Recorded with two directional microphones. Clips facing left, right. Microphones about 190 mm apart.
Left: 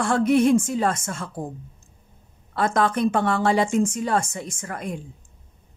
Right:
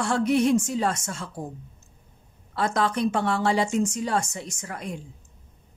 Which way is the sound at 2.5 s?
55° left (ahead or behind).